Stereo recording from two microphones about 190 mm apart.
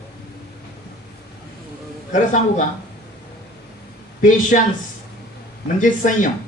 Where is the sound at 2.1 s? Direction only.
40° left (ahead or behind).